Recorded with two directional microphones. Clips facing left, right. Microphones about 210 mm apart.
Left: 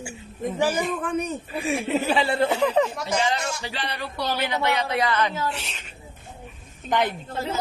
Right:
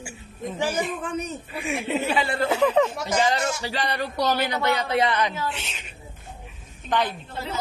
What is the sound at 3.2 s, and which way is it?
A man's voice, 40° right (ahead or behind).